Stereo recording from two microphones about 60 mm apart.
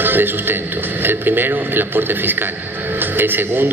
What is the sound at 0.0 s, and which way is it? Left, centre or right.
A man's voice, right.